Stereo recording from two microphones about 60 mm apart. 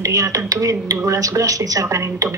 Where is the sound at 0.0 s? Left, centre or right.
Right.